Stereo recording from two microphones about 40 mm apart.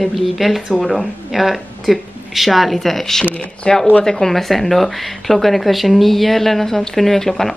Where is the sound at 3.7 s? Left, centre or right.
Left.